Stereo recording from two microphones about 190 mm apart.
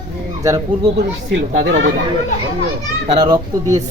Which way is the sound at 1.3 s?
70° right (ahead or behind).